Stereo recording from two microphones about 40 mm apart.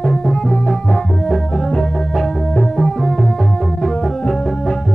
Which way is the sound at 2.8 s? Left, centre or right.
Centre.